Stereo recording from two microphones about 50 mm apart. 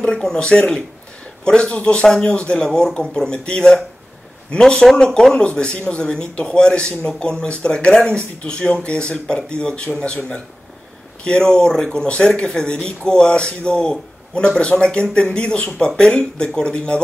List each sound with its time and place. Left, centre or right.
0.0 s speech: centre